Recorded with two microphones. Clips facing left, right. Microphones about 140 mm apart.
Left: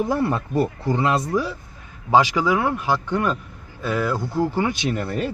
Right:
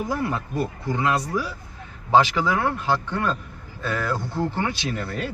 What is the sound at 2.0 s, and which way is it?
Speech, 15° left (ahead or behind).